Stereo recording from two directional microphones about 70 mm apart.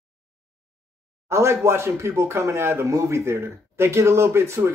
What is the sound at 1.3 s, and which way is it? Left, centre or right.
Speech, right.